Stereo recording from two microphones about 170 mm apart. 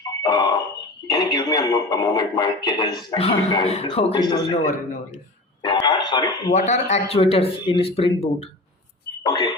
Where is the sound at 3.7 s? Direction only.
35° left (ahead or behind).